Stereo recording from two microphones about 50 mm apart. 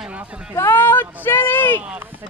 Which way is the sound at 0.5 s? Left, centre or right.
Left.